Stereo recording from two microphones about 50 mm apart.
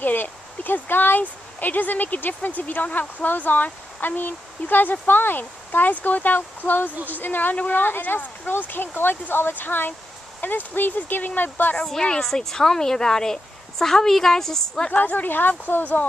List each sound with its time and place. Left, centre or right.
0.0 s speech: left
11.7 s a woman's voice: centre
14.9 s speech: left